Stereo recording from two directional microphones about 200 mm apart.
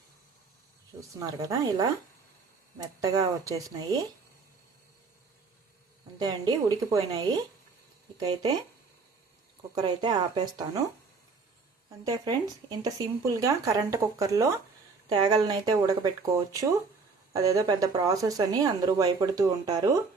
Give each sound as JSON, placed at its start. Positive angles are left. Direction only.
{"t": 1.2, "sound": "speech", "side_deg": -20}
{"t": 6.2, "sound": "speech", "side_deg": -20}
{"t": 9.7, "sound": "speech", "side_deg": -20}
{"t": 11.9, "sound": "speech", "side_deg": -20}